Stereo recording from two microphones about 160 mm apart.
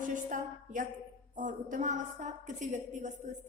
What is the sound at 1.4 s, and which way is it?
A woman's voice, 55° right (ahead or behind).